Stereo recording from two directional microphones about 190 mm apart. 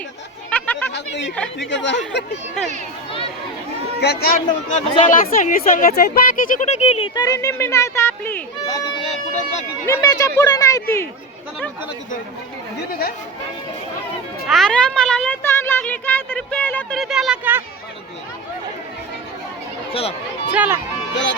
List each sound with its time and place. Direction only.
0.5 s a sound: 10° left (ahead or behind)
0.9 s speech: 65° left (ahead or behind)
2.6 s speech: 5° left (ahead or behind)
4.0 s speech: 55° left (ahead or behind)
4.7 s speech: 40° left (ahead or behind)
7.1 s speech: 20° left (ahead or behind); by 9.6 s 35° left (ahead or behind)
9.8 s speech: 15° left (ahead or behind)
12.9 s speech: 50° left (ahead or behind)
14.4 s speech: centre (ahead or behind)
19.9 s speech: 30° left (ahead or behind)
20.5 s speech: 10° right (ahead or behind)